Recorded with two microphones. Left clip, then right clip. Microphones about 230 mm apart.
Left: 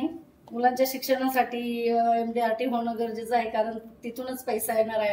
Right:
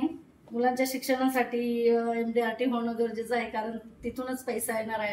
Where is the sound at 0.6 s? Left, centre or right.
Centre.